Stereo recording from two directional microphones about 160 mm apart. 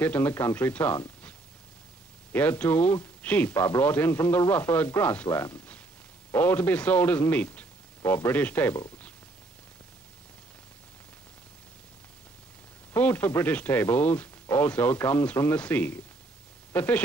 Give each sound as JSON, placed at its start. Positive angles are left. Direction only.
{"t": 0.0, "sound": "speech", "side_deg": 10}
{"t": 2.3, "sound": "a man's voice", "side_deg": 10}
{"t": 12.9, "sound": "speech", "side_deg": 10}